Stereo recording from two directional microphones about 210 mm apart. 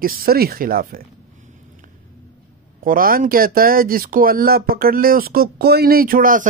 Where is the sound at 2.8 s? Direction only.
45° right (ahead or behind).